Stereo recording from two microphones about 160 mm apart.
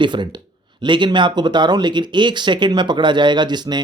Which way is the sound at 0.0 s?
30° right (ahead or behind).